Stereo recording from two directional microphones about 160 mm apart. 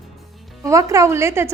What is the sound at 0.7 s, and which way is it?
Speech, 20° right (ahead or behind).